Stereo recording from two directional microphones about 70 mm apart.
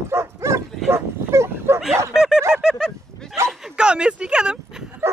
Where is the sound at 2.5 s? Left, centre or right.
Centre.